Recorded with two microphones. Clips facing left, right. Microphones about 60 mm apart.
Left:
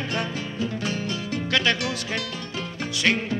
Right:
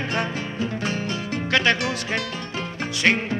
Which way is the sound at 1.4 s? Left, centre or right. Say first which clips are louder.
Right 3 dB; right.